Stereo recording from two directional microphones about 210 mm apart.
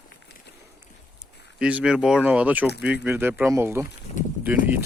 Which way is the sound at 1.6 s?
5° right (ahead or behind).